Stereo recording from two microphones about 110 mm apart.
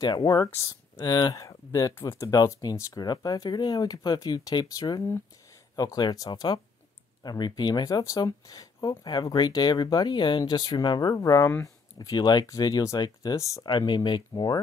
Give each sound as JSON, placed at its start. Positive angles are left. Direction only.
{"t": 0.0, "sound": "speech", "side_deg": 40}
{"t": 0.5, "sound": "speech", "side_deg": 25}
{"t": 0.9, "sound": "speech", "side_deg": 40}
{"t": 13.7, "sound": "speech", "side_deg": 45}